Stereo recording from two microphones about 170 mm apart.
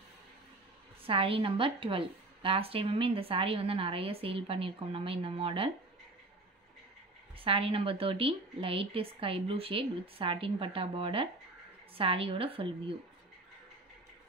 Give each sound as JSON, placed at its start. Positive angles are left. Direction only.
{"t": 1.0, "sound": "a woman's voice", "side_deg": -35}
{"t": 7.3, "sound": "a woman's voice", "side_deg": -30}